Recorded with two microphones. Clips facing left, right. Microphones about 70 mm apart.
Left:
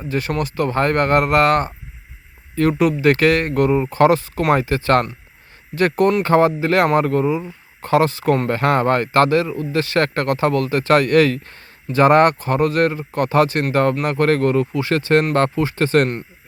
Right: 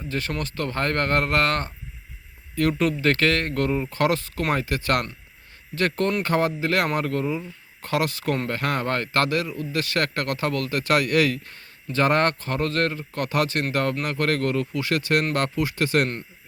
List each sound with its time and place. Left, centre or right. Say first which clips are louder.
0.1 s speech: left 7 dB; left
2.7 s speech: left 6 dB; centre
10.9 s speech: left 7 dB; left
11.9 s speech: left 8 dB; left